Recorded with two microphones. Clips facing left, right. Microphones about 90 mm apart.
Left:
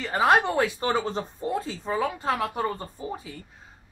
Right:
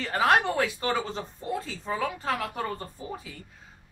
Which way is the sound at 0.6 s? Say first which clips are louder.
Left 3 dB; 30° left (ahead or behind).